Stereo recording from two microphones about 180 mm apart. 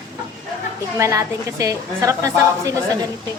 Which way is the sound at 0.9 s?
15° right (ahead or behind).